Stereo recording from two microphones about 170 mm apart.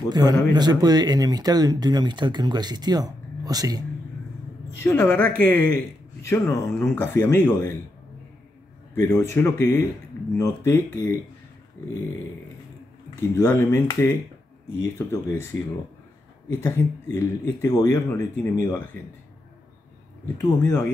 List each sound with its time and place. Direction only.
0.1 s speech: 25° right (ahead or behind)
4.8 s speech: 15° left (ahead or behind)
8.9 s a man's voice: 15° left (ahead or behind)
13.3 s speech: 15° left (ahead or behind)
16.5 s speech: 15° left (ahead or behind)
20.3 s speech: 20° left (ahead or behind)